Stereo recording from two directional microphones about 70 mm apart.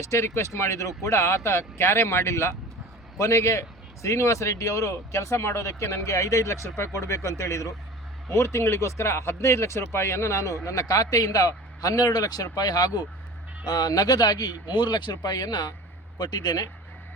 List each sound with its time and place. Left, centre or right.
0.0 s speech: left